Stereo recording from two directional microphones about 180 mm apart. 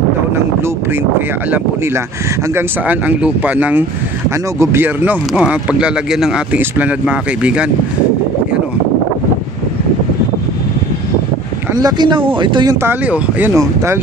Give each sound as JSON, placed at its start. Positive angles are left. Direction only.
{"t": 2.5, "sound": "speech", "side_deg": -10}
{"t": 11.7, "sound": "speech", "side_deg": -20}
{"t": 12.8, "sound": "speech", "side_deg": -10}